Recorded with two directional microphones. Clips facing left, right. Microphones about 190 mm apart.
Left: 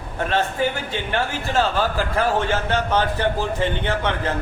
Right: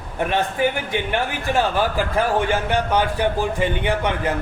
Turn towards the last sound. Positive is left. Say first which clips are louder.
# right 2 dB
turn(degrees=-15)  # may be behind; listen again after turning